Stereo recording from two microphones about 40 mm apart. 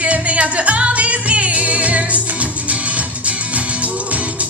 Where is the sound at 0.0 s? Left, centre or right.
Right.